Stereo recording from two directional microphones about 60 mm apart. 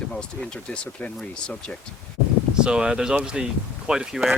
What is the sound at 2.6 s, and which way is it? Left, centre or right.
Speech, centre.